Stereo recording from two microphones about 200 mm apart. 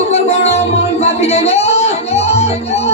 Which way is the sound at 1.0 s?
30° left (ahead or behind).